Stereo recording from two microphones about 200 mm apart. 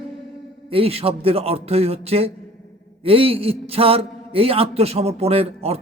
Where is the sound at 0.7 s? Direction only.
30° right (ahead or behind).